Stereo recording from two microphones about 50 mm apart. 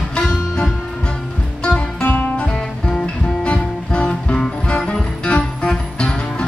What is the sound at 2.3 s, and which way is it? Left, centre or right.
Music, centre.